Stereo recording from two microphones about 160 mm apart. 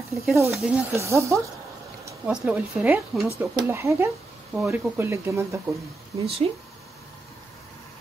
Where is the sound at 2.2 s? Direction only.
5° right (ahead or behind).